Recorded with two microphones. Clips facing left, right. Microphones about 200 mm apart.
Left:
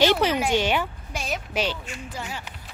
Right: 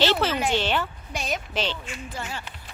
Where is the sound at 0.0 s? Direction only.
15° left (ahead or behind).